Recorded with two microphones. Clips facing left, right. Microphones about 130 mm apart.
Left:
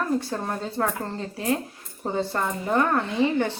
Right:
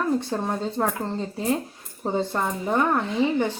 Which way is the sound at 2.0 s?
15° right (ahead or behind).